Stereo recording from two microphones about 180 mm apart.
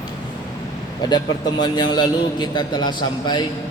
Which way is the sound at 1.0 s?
25° left (ahead or behind).